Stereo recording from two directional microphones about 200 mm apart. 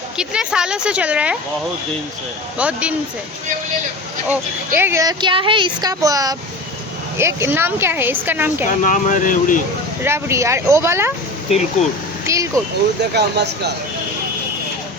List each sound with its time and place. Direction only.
0.2 s a woman's voice: 5° right (ahead or behind)
2.6 s speech: 5° right (ahead or behind)
4.3 s speech: 10° right (ahead or behind)
8.6 s speech: 40° left (ahead or behind)
10.0 s speech: 15° right (ahead or behind)
12.2 s vehicle: 15° right (ahead or behind)
13.0 s speech: 55° right (ahead or behind)